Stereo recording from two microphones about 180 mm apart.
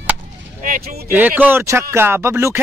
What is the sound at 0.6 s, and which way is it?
Speech, 50° right (ahead or behind).